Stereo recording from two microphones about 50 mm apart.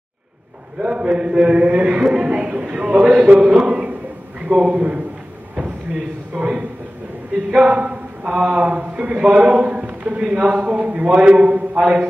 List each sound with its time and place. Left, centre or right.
0.7 s a man's voice: right
6.3 s a man's voice: centre
7.5 s a man's voice: right